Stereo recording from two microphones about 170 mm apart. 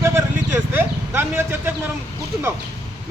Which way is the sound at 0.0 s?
15° right (ahead or behind).